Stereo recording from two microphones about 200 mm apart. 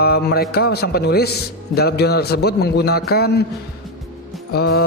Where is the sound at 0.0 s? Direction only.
50° left (ahead or behind).